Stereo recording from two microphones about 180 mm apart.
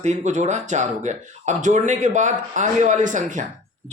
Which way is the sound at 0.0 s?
40° right (ahead or behind).